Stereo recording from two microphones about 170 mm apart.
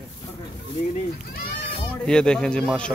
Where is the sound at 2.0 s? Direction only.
5° left (ahead or behind).